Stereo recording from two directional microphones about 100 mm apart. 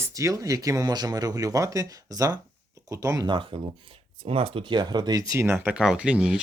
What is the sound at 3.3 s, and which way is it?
Speech, 55° right (ahead or behind).